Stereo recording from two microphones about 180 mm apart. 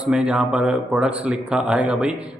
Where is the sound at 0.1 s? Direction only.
5° right (ahead or behind).